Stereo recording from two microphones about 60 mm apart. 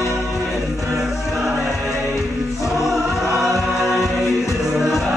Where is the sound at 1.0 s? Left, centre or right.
Centre.